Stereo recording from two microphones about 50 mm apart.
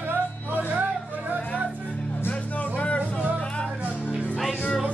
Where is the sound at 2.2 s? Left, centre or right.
Left.